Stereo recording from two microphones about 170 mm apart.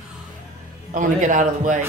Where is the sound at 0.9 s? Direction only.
50° right (ahead or behind).